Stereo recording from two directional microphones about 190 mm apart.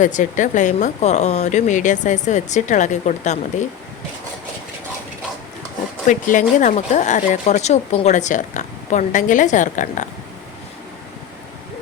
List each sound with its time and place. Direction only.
0.0 s speech: 40° left (ahead or behind)
6.1 s speech: 40° left (ahead or behind)